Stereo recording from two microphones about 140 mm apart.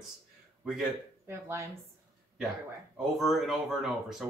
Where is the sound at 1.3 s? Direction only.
20° right (ahead or behind).